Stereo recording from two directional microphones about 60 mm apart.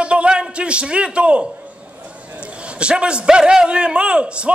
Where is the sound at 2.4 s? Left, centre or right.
Centre.